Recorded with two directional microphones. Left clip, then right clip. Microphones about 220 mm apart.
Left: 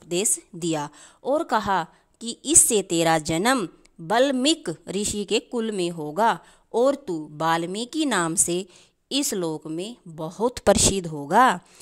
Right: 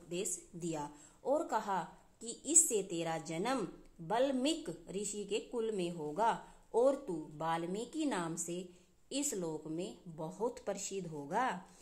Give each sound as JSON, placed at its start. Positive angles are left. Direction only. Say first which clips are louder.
{"t": 0.1, "sound": "a woman's voice", "louder": "left 15 dB", "side_deg": 50}